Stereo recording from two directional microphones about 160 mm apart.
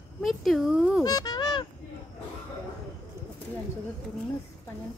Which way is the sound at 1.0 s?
25° left (ahead or behind).